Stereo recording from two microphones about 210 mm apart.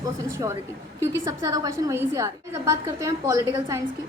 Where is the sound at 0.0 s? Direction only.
15° right (ahead or behind).